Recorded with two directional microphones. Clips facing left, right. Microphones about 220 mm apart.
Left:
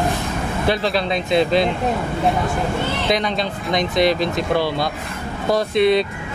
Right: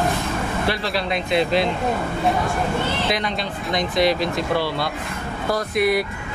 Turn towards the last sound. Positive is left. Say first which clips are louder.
# left 4 dB
turn(degrees=25)  # may be behind; listen again after turning